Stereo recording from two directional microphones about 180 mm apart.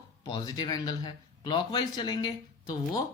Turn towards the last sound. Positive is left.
turn(degrees=20)  # may be behind; listen again after turning